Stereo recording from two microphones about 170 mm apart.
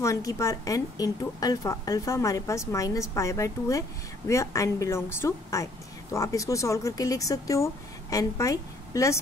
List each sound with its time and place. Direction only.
0.0 s a woman's voice: 20° left (ahead or behind)